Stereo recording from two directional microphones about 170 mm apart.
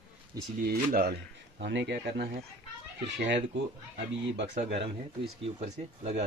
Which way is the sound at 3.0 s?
90° right.